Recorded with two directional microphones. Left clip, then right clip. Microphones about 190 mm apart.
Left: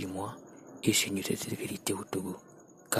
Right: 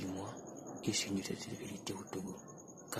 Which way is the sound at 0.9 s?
35° left (ahead or behind).